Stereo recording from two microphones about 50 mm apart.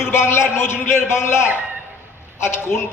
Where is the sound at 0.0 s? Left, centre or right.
Left.